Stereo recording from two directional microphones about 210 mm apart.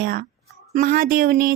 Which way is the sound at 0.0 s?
45° right (ahead or behind).